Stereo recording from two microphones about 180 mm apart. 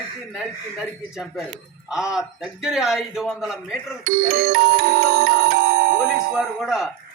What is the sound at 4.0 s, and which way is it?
Music, 55° right (ahead or behind).